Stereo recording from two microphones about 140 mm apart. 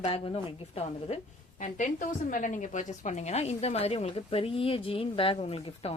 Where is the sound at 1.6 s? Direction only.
65° left (ahead or behind).